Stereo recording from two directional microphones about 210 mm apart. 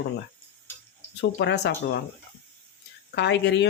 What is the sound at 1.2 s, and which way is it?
Speech, 55° left (ahead or behind).